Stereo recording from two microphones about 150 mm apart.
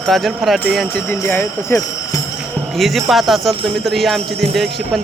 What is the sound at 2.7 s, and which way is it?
Speech, centre (ahead or behind).